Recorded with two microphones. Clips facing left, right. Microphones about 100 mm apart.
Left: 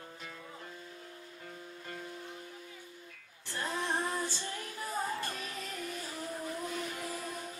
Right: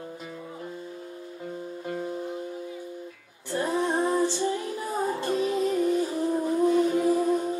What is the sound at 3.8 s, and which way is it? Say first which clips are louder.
Music: right 10 dB; 30° right (ahead or behind).